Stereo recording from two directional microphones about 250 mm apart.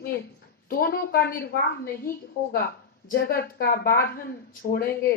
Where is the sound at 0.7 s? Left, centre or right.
Left.